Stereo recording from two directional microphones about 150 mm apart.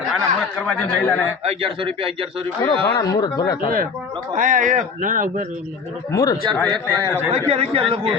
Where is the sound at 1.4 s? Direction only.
40° right (ahead or behind).